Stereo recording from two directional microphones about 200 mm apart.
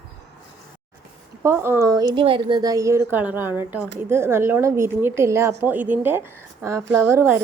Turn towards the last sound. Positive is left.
turn(degrees=-15)  # may be behind; listen again after turning